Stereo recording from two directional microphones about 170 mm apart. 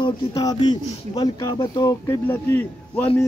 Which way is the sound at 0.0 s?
20° left (ahead or behind).